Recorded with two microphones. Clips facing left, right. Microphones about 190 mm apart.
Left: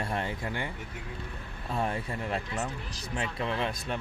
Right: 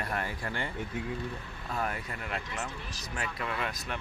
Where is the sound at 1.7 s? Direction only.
30° left (ahead or behind).